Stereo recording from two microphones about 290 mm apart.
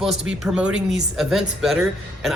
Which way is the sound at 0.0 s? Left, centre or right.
Centre.